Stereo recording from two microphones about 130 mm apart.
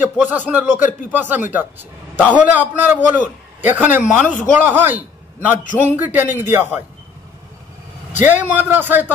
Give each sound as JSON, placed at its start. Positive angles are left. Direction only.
{"t": 0.2, "sound": "a man's voice", "side_deg": -15}
{"t": 8.2, "sound": "speech", "side_deg": -15}